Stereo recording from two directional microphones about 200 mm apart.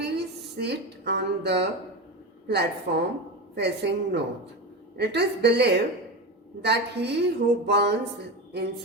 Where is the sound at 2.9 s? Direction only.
55° right (ahead or behind).